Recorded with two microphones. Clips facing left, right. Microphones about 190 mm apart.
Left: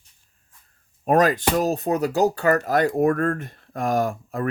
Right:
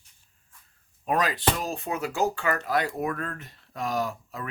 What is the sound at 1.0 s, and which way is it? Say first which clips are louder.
Speech: left 7 dB; 45° left (ahead or behind).